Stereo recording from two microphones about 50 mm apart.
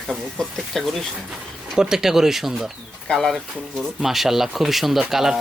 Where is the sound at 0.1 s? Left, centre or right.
Centre.